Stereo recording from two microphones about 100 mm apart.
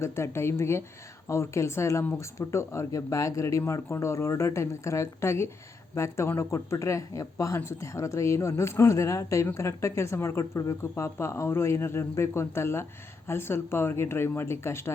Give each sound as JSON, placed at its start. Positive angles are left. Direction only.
{"t": 0.0, "sound": "speech", "side_deg": 25}